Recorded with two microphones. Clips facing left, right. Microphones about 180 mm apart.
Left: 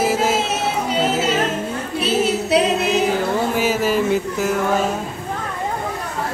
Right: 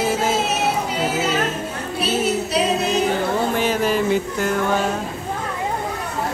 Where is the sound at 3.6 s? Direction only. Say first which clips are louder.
Left 1 dB; 5° left (ahead or behind).